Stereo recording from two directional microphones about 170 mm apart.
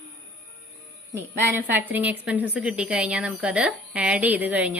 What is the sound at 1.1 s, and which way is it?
A woman's voice, 15° right (ahead or behind).